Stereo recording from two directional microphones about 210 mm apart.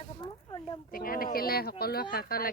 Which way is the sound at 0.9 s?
45° left (ahead or behind).